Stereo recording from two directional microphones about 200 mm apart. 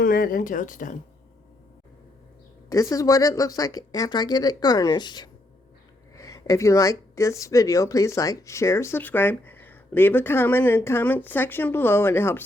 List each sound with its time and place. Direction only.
0.0 s a woman's voice: 45° left (ahead or behind)
2.6 s speech: 15° left (ahead or behind)